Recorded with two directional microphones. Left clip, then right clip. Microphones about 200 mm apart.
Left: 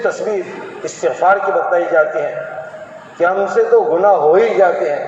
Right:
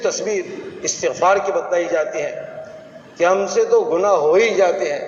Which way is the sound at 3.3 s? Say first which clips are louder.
Left 3 dB; 5° left (ahead or behind).